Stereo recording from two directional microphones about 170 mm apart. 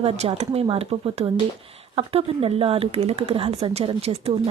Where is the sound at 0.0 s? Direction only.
35° right (ahead or behind).